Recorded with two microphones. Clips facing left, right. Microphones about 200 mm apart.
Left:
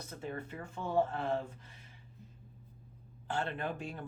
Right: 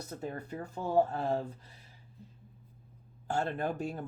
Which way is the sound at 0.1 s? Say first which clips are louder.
Right 2 dB; 40° right (ahead or behind).